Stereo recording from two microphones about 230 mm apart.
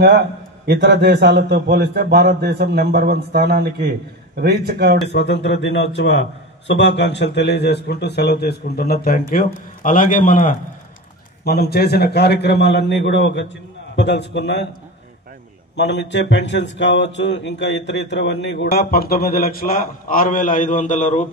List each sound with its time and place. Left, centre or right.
0.7 s a man's voice: right
5.0 s a man's voice: left
15.7 s speech: left